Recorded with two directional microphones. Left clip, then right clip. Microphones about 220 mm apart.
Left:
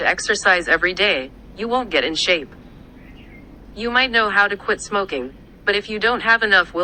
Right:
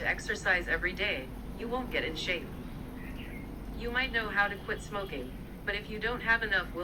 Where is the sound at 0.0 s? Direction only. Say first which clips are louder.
Left 14 dB; 40° left (ahead or behind).